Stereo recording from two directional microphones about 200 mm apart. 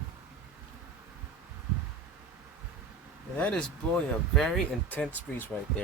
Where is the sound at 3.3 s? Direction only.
5° left (ahead or behind).